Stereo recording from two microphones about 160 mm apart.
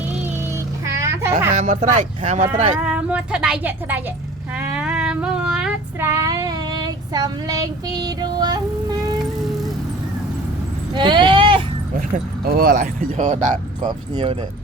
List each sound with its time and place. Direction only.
0.9 s a sound: 15° right (ahead or behind)
1.5 s speech: 50° right (ahead or behind)
2.7 s speech: 5° right (ahead or behind)
4.5 s child singing: 10° right (ahead or behind)
6.1 s child singing: 20° right (ahead or behind)
10.9 s a sound: 30° right (ahead or behind)
11.9 s speech: 60° right (ahead or behind)
13.8 s speech: 30° right (ahead or behind)